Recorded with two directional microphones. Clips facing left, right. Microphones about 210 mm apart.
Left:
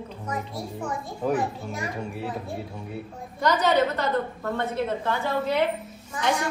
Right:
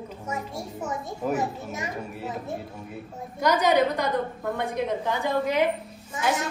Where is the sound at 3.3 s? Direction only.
10° right (ahead or behind).